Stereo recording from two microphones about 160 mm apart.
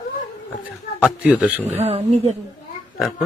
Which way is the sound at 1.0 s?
10° right (ahead or behind).